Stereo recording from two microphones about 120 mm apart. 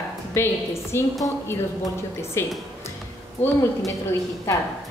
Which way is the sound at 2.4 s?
20° left (ahead or behind).